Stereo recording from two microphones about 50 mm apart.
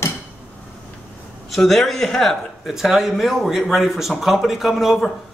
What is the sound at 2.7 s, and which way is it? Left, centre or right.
A man's voice, centre.